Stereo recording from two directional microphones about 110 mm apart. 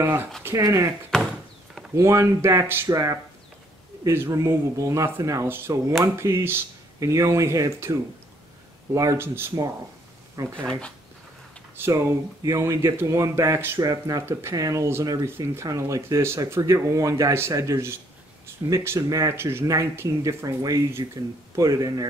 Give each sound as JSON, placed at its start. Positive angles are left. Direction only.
{"t": 0.0, "sound": "speech", "side_deg": -20}
{"t": 1.1, "sound": "a sound", "side_deg": 5}
{"t": 2.0, "sound": "speech", "side_deg": -25}
{"t": 4.0, "sound": "speech", "side_deg": -25}
{"t": 10.5, "sound": "speech", "side_deg": 10}
{"t": 11.7, "sound": "speech", "side_deg": -20}